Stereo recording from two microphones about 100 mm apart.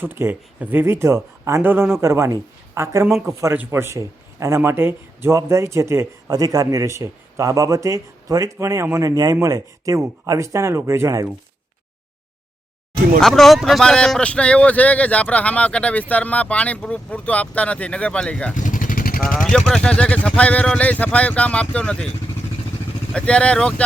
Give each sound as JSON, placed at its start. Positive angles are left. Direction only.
{"t": 0.0, "sound": "speech", "side_deg": -20}
{"t": 13.1, "sound": "speech", "side_deg": 5}
{"t": 23.1, "sound": "speech", "side_deg": 10}